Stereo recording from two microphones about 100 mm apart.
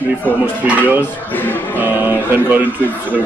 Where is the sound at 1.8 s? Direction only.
20° right (ahead or behind).